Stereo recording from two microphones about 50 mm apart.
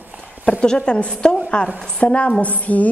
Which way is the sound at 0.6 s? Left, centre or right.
Centre.